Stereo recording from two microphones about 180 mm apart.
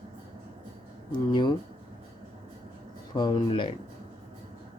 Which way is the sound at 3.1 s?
25° left (ahead or behind).